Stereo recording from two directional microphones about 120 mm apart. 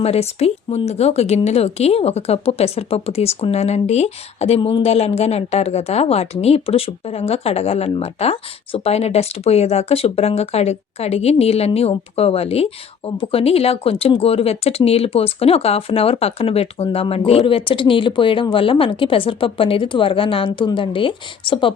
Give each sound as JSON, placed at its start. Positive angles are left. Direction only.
{"t": 0.0, "sound": "speech", "side_deg": 60}